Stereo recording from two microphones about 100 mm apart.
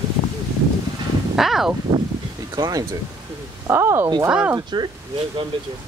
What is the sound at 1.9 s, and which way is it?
Speech, 40° right (ahead or behind).